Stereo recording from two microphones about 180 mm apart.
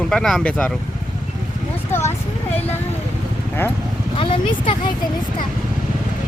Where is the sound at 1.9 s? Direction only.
15° left (ahead or behind).